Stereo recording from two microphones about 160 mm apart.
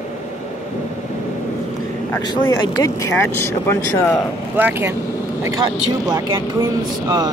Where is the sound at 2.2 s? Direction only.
25° left (ahead or behind).